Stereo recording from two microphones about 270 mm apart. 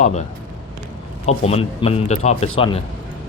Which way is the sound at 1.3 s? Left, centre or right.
Left.